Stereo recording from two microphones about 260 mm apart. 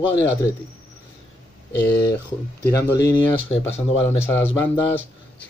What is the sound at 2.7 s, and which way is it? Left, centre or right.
Speech, centre.